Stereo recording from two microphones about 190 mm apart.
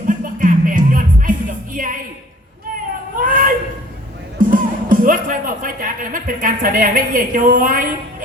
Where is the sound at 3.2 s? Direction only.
45° right (ahead or behind).